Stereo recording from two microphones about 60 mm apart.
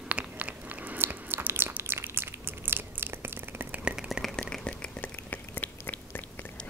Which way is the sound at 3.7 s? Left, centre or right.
Centre.